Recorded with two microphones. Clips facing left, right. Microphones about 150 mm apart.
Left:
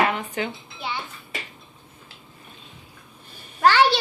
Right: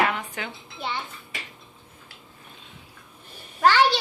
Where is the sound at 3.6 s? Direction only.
5° left (ahead or behind).